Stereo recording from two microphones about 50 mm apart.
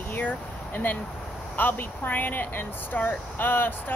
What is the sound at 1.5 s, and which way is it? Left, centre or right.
Speech, left.